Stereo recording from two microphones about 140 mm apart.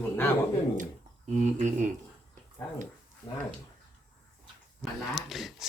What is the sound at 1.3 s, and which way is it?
Speech, 60° right (ahead or behind).